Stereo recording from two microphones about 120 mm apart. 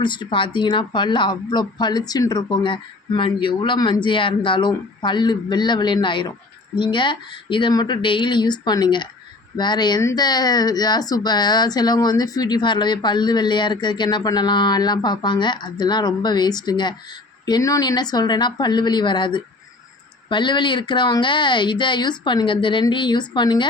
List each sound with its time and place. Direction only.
0.0 s speech: 40° left (ahead or behind)
10.0 s speech: 25° left (ahead or behind)
10.2 s speech: 35° left (ahead or behind)